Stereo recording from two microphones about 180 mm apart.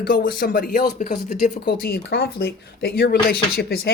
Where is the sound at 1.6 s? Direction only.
60° left (ahead or behind).